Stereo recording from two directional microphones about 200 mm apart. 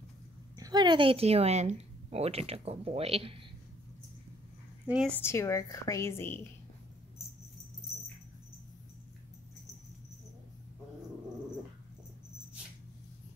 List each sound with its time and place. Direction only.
0.6 s speech: 20° right (ahead or behind)
4.8 s a woman's voice: 5° right (ahead or behind)
5.1 s a woman's voice: 15° left (ahead or behind)